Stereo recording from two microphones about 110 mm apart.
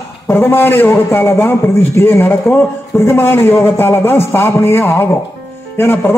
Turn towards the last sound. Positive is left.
turn(degrees=20)  # may be behind; listen again after turning